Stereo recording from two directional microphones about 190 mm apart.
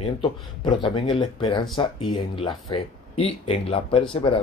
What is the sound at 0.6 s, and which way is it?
Speech, 25° left (ahead or behind).